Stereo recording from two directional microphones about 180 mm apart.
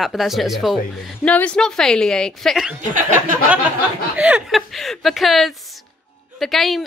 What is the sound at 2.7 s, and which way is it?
Speech, 45° right (ahead or behind).